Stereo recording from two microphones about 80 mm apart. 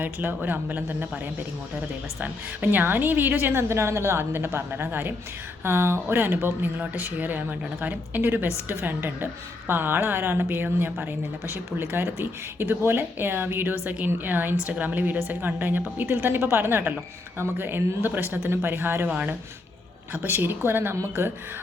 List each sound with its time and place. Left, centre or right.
0.0 s a woman's voice: right
19.0 s speech: centre
20.1 s a woman's voice: right